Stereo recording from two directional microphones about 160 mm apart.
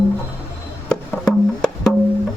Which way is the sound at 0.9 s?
5° left (ahead or behind).